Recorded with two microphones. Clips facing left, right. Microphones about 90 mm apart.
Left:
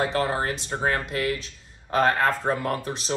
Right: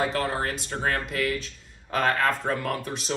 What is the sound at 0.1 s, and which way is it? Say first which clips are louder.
Speech: left 2 dB; 20° left (ahead or behind).